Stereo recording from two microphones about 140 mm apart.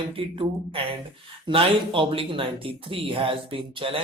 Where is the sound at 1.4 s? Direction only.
40° right (ahead or behind).